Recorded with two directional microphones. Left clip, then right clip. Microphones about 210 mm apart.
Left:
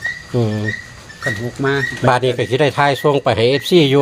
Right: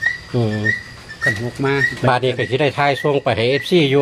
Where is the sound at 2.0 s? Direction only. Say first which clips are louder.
Left 2 dB; 30° left (ahead or behind).